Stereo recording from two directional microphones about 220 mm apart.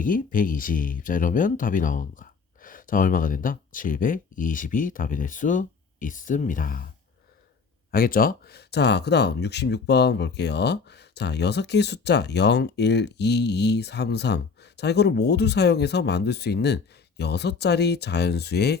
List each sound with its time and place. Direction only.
0.0 s speech: 40° left (ahead or behind)